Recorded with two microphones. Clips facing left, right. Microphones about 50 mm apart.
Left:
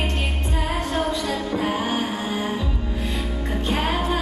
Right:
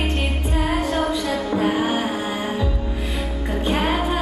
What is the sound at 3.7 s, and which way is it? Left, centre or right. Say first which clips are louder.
Music: right 2 dB; centre.